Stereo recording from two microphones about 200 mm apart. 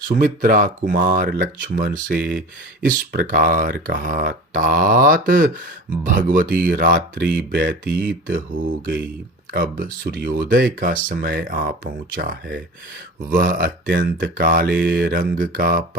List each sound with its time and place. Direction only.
0.2 s speech: 40° right (ahead or behind)
7.5 s speech: 55° right (ahead or behind)
9.5 s speech: 45° right (ahead or behind)